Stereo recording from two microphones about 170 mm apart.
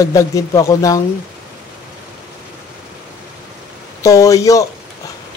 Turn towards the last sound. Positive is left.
turn(degrees=20)  # may be behind; listen again after turning